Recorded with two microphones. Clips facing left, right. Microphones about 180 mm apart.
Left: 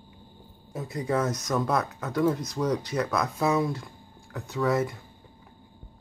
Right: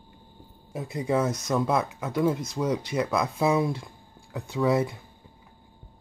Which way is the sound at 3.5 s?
20° right (ahead or behind).